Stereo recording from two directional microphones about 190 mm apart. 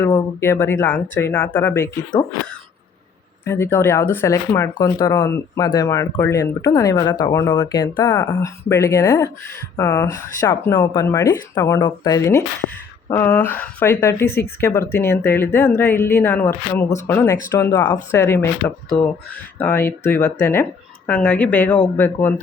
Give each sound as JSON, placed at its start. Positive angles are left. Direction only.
{"t": 0.0, "sound": "speech", "side_deg": 15}
{"t": 3.4, "sound": "speech", "side_deg": 10}